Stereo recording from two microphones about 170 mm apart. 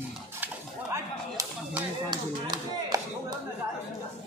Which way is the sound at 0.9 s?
20° right (ahead or behind).